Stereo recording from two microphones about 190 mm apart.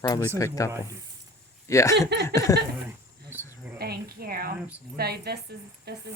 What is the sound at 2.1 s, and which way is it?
Speech, 65° right (ahead or behind).